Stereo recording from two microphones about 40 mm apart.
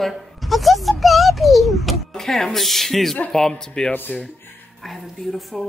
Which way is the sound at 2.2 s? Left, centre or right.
Centre.